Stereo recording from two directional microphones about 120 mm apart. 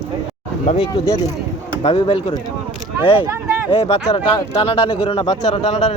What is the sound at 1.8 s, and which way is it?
Speech, 50° left (ahead or behind).